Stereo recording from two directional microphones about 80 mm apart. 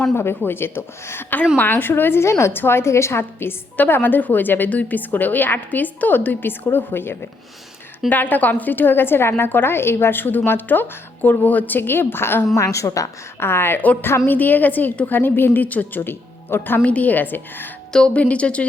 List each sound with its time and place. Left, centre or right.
0.1 s a woman's voice: left
12.5 s a woman's voice: left
13.4 s a woman's voice: left
17.9 s a woman's voice: centre